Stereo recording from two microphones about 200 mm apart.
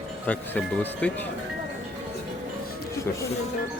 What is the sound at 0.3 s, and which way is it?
Speech, 10° left (ahead or behind).